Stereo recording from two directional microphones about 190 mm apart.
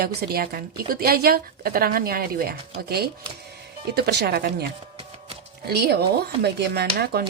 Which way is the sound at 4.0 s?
60° right (ahead or behind).